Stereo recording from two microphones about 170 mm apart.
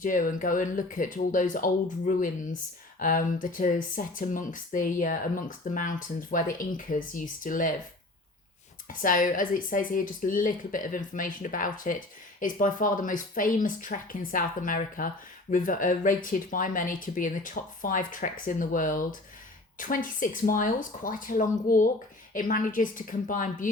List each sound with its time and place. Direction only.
0.0 s speech: 50° left (ahead or behind)
8.9 s speech: 55° left (ahead or behind)